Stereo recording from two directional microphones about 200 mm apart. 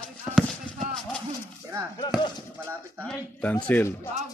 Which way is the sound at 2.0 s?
20° left (ahead or behind).